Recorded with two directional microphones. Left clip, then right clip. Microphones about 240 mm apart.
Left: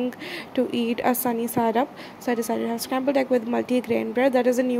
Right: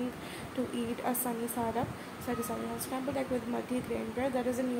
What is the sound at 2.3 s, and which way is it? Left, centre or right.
A woman's voice, left.